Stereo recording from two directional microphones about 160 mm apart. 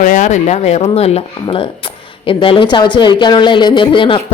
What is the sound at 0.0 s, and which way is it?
A woman's voice, 50° left (ahead or behind).